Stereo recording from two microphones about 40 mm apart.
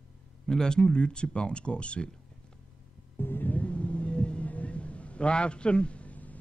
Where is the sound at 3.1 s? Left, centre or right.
Left.